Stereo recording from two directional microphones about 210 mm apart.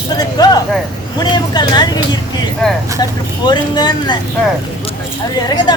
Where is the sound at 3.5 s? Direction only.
20° left (ahead or behind).